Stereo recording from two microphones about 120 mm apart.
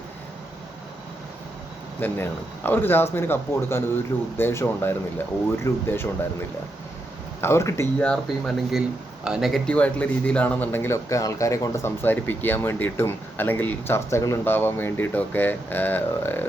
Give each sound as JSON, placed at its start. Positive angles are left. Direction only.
{"t": 2.0, "sound": "speech", "side_deg": 15}
{"t": 7.4, "sound": "speech", "side_deg": 25}
{"t": 7.9, "sound": "speech", "side_deg": 5}
{"t": 9.6, "sound": "speech", "side_deg": 10}